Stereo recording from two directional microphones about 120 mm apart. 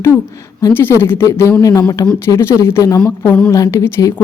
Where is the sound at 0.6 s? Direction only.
15° left (ahead or behind).